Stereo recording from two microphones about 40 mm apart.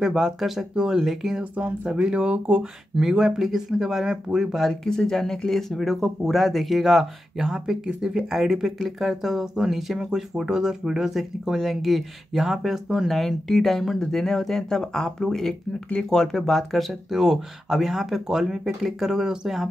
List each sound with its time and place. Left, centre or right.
0.0 s speech: centre
1.6 s speech: right
3.0 s speech: centre
4.8 s speech: centre
13.1 s speech: centre
17.1 s speech: centre